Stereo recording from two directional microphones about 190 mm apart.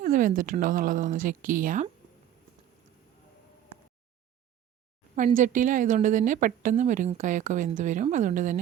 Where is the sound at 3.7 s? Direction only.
30° right (ahead or behind).